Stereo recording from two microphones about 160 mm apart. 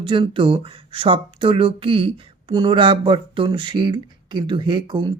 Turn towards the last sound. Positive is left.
turn(degrees=-30)  # may be behind; listen again after turning